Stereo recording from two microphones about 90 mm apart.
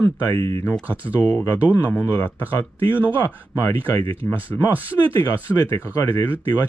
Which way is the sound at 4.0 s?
90° right.